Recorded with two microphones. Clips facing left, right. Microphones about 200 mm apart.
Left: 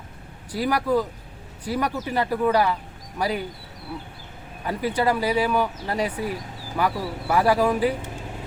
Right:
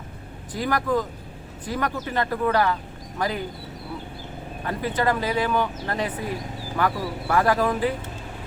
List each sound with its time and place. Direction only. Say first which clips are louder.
0.5 s speech: left 2 dB; 10° left (ahead or behind)
4.6 s speech: left 1 dB; 10° left (ahead or behind)